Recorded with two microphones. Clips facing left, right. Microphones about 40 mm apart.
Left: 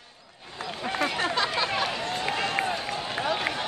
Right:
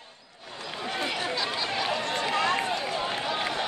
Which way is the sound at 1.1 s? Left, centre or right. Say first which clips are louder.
Left 3 dB; left.